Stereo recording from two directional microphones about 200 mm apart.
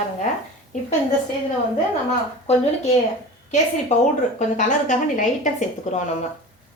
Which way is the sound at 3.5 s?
35° left (ahead or behind).